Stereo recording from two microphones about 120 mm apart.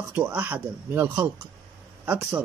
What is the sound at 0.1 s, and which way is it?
Speech, 15° right (ahead or behind).